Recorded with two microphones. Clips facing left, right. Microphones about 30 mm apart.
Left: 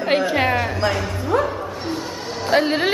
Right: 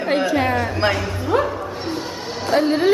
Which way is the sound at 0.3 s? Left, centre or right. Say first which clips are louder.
Even; left.